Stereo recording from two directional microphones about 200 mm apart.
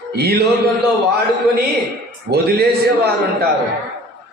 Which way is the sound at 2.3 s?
50° right (ahead or behind).